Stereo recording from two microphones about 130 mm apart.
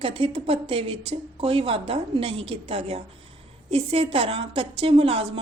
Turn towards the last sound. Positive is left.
turn(degrees=-45)  # may be behind; listen again after turning